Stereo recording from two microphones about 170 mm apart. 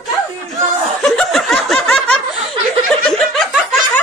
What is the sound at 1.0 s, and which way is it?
Snicker, 5° left (ahead or behind).